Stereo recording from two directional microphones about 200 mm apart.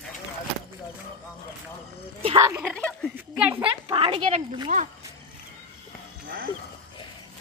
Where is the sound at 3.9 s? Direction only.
25° right (ahead or behind).